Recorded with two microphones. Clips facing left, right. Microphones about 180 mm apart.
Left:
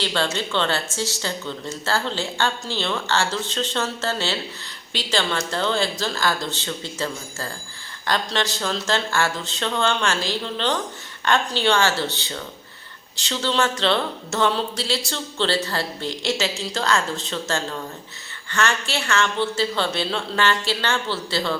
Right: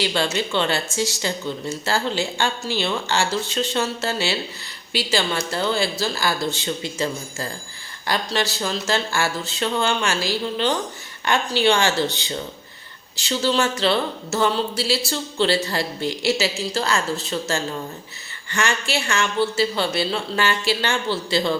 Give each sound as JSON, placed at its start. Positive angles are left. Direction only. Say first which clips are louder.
{"t": 0.0, "sound": "speech", "louder": "right 2 dB", "side_deg": -10}